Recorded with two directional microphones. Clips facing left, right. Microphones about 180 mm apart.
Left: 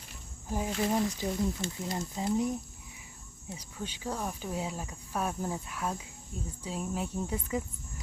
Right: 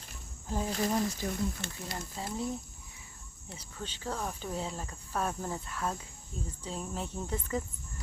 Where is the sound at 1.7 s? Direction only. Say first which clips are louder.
Left 5 dB; 20° left (ahead or behind).